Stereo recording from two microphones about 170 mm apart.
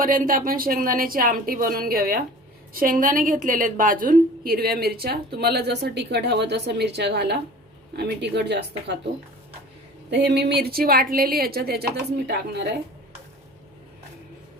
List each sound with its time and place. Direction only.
0.0 s a woman's voice: 55° right (ahead or behind); by 9.0 s 80° right
10.1 s a woman's voice: 85° right; by 11.9 s 65° right (ahead or behind)
12.3 s speech: 80° right